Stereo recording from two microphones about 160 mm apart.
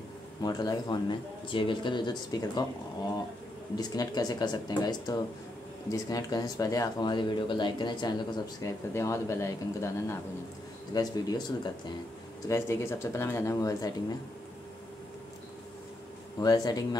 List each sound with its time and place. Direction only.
0.4 s speech: 25° left (ahead or behind)
3.7 s speech: 25° left (ahead or behind)
16.3 s speech: 25° left (ahead or behind)